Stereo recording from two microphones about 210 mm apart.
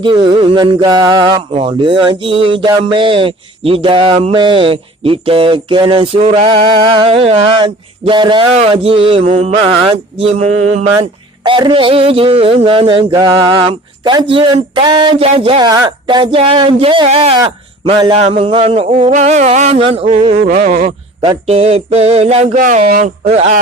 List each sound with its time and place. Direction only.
0.0 s speech: 25° right (ahead or behind)